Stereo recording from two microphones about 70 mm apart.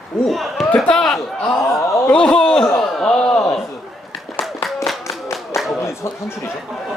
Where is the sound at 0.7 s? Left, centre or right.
Centre.